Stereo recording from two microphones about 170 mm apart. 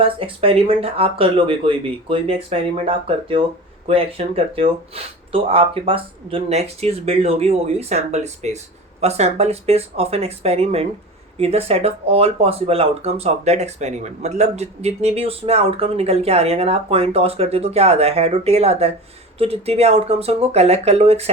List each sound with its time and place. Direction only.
0.0 s speech: 35° right (ahead or behind)